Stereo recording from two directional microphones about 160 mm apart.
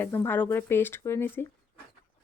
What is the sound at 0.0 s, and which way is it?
Speech, 15° left (ahead or behind).